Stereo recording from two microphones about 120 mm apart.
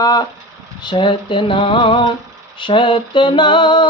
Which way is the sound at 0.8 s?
45° left (ahead or behind).